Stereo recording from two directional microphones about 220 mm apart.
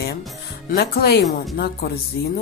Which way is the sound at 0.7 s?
45° left (ahead or behind).